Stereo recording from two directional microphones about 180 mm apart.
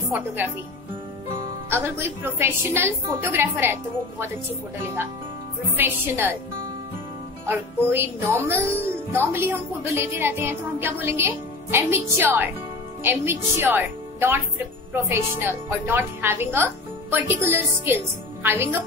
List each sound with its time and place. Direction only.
1.7 s speech: 15° right (ahead or behind)
5.8 s speech: 10° right (ahead or behind)
7.4 s a woman's voice: 15° right (ahead or behind)